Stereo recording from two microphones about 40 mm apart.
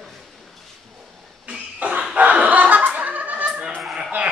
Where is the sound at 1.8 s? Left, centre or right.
Right.